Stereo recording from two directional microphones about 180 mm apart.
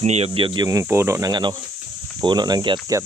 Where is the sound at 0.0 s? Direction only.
35° right (ahead or behind).